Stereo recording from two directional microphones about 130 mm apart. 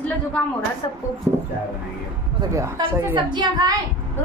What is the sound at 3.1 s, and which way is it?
Speech, 35° right (ahead or behind).